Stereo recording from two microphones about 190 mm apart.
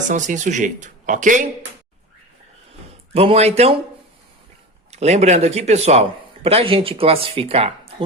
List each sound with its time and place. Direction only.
0.1 s speech: 40° right (ahead or behind)
3.1 s speech: 30° right (ahead or behind)
4.9 s speech: 35° right (ahead or behind)